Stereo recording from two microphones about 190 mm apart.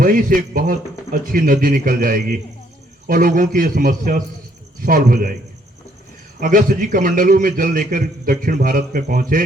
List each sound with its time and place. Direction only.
0.0 s a man's voice: 45° right (ahead or behind)
6.4 s a man's voice: 45° right (ahead or behind)